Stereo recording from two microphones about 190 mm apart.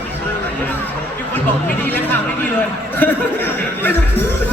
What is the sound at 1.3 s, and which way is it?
Chatter, 10° left (ahead or behind).